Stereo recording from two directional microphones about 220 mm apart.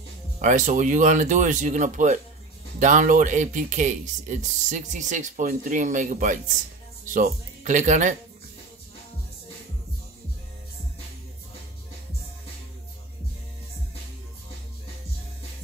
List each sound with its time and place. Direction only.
0.4 s speech: 35° right (ahead or behind)